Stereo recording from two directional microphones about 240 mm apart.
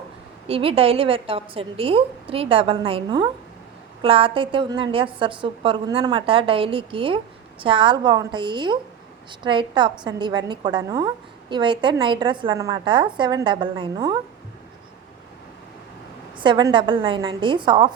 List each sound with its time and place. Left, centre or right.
0.4 s a woman's voice: right
16.4 s a woman's voice: centre